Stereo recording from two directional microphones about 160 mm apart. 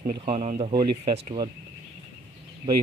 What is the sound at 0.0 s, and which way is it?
Speech, 45° right (ahead or behind).